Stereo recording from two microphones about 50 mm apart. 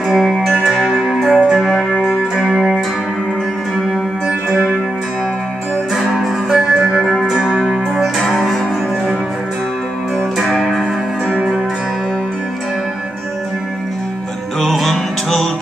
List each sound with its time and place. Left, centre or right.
0.1 s music: centre
1.7 s music: centre
5.9 s music: centre
7.3 s music: centre
8.0 s music: centre
10.5 s music: centre
14.6 s music: centre